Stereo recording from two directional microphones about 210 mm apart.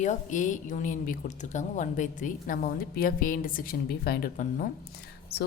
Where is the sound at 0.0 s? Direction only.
35° left (ahead or behind).